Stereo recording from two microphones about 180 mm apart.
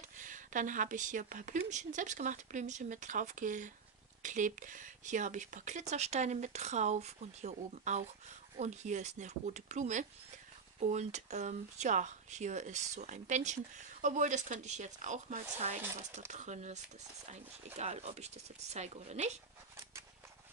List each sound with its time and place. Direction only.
0.2 s a woman's voice: 45° right (ahead or behind)